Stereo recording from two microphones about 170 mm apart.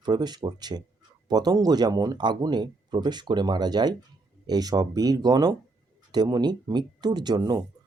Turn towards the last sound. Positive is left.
turn(degrees=-25)  # may be behind; listen again after turning